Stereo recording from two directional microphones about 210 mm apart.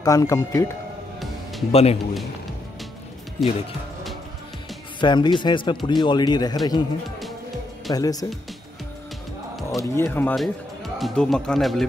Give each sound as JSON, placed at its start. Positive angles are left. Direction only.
{"t": 0.0, "sound": "speech", "side_deg": 15}
{"t": 1.7, "sound": "speech", "side_deg": 30}
{"t": 3.4, "sound": "speech", "side_deg": 0}
{"t": 5.0, "sound": "speech", "side_deg": 20}
{"t": 7.9, "sound": "speech", "side_deg": 15}
{"t": 9.8, "sound": "speech", "side_deg": 10}
{"t": 10.3, "sound": "speech", "side_deg": 0}